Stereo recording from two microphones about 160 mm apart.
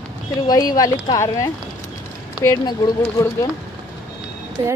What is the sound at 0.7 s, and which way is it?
A woman's voice, 25° left (ahead or behind).